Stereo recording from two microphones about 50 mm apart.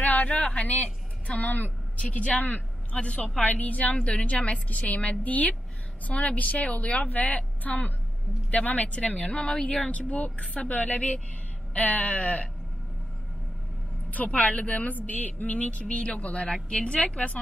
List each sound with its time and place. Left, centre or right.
0.0 s a sound: left
0.5 s a woman's voice: left
14.1 s speech: left